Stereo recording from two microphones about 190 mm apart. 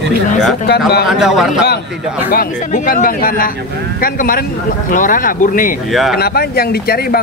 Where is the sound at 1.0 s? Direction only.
Centre (ahead or behind).